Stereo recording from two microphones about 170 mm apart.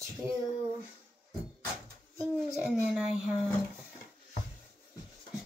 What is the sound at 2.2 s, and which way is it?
A child's voice, centre (ahead or behind).